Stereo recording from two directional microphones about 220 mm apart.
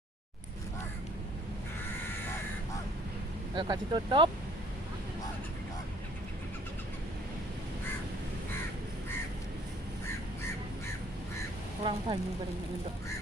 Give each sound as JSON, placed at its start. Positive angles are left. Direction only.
{"t": 3.5, "sound": "speech", "side_deg": -20}
{"t": 11.8, "sound": "speech", "side_deg": -25}